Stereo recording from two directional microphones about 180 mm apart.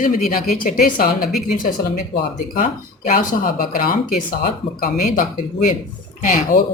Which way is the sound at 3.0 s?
50° left (ahead or behind).